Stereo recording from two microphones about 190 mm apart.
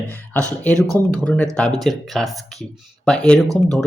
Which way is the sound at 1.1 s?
5° left (ahead or behind).